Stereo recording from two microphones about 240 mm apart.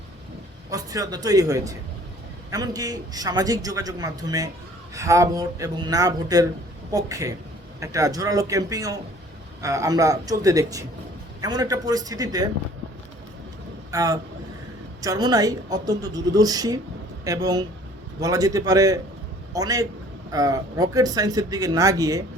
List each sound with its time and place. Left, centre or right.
0.7 s a man's voice: centre
13.9 s a man's voice: centre